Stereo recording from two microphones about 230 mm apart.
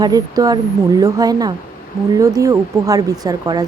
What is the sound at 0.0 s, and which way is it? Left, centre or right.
Speech, centre.